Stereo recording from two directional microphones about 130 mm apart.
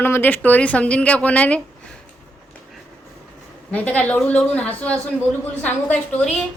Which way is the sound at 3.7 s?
10° left (ahead or behind).